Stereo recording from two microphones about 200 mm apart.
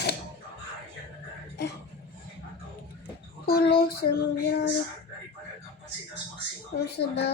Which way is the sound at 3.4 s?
50° left (ahead or behind).